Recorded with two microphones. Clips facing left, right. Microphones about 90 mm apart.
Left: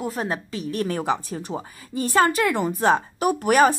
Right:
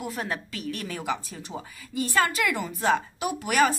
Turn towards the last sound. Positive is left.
turn(degrees=50)  # may be behind; listen again after turning